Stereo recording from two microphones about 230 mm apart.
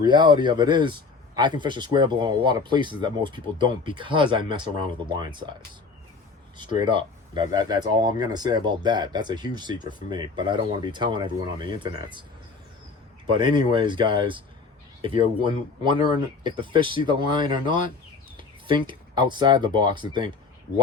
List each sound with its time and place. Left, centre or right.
0.0 s speech: centre
6.6 s speech: right
13.2 s speech: right